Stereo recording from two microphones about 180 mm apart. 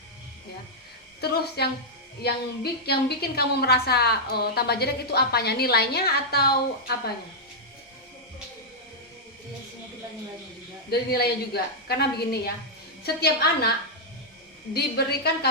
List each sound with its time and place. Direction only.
1.2 s a woman's voice: 60° left (ahead or behind)
10.9 s a woman's voice: 60° left (ahead or behind)
14.7 s a woman's voice: 60° left (ahead or behind)